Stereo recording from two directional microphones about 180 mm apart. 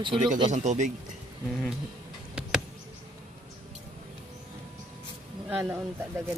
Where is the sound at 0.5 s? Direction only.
40° right (ahead or behind).